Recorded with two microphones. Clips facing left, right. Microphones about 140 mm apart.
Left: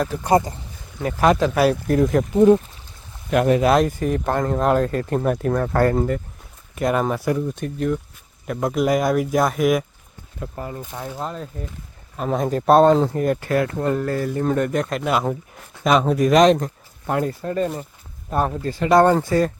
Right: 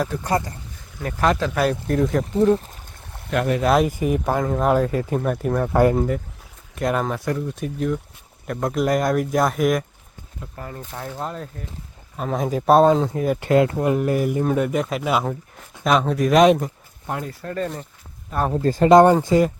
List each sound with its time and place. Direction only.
0.3 s speech: 20° left (ahead or behind)
1.9 s speech: 5° left (ahead or behind)
3.2 s speech: 20° left (ahead or behind)
3.6 s speech: centre (ahead or behind)
3.8 s speech: 10° right (ahead or behind)
10.5 s speech: 20° left (ahead or behind)
11.2 s speech: 5° right (ahead or behind)
13.4 s speech: 20° right (ahead or behind); by 16.7 s 5° right (ahead or behind)
17.4 s speech: 15° left (ahead or behind)
18.5 s speech: 40° right (ahead or behind)
18.9 s speech: 15° right (ahead or behind)